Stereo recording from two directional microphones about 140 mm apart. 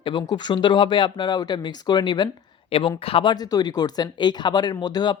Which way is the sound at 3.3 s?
30° left (ahead or behind).